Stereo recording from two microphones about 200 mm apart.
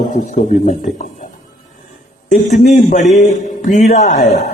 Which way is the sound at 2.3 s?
40° left (ahead or behind).